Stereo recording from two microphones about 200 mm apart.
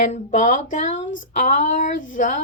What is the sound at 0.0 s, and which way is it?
Speech, 35° left (ahead or behind).